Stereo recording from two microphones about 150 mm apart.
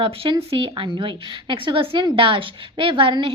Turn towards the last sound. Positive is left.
turn(degrees=-35)  # may be behind; listen again after turning